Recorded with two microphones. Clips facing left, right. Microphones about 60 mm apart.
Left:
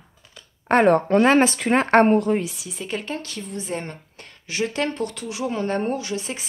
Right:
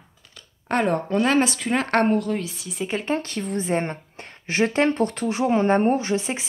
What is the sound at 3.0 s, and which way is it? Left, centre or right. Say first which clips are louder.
A woman's voice: right 5 dB; right.